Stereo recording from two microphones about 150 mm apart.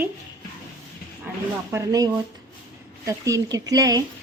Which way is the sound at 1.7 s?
20° right (ahead or behind).